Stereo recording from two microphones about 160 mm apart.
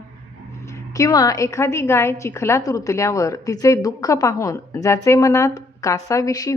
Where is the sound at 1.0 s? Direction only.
25° left (ahead or behind).